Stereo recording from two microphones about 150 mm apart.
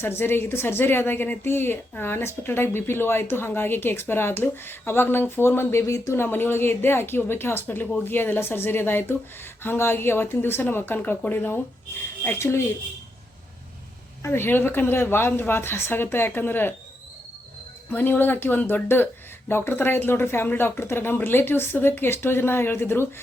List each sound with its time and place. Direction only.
0.0 s a woman's voice: 15° left (ahead or behind)
14.2 s a woman's voice: 15° left (ahead or behind)
17.9 s a woman's voice: 15° left (ahead or behind)